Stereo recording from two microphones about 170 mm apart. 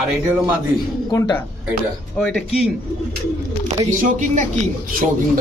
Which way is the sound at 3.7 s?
45° right (ahead or behind).